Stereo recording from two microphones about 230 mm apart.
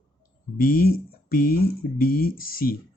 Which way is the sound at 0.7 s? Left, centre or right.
Left.